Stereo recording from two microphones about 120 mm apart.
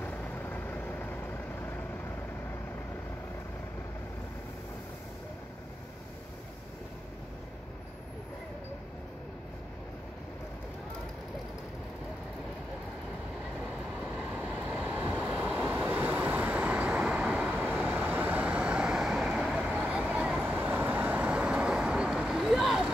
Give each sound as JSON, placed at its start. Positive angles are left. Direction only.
{"t": 0.0, "sound": "vehicle", "side_deg": 15}
{"t": 14.3, "sound": "vehicle", "side_deg": -10}